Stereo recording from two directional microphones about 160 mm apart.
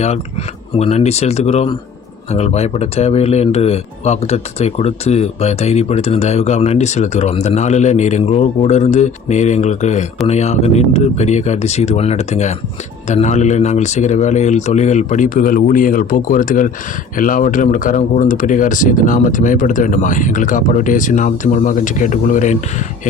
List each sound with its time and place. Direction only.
0.8 s speech: 40° left (ahead or behind)